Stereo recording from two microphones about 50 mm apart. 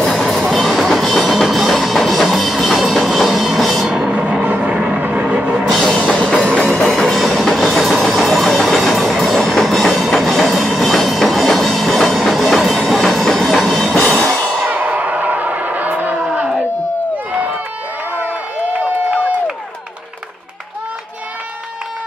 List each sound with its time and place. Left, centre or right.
0.0 s music: centre
4.1 s music: right
5.7 s music: centre
5.9 s music: centre
7.0 s music: centre
14.7 s vehicle: right